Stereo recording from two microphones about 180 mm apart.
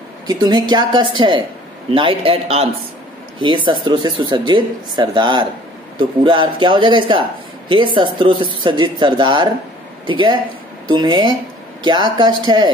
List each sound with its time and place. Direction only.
0.3 s a man's voice: 20° right (ahead or behind)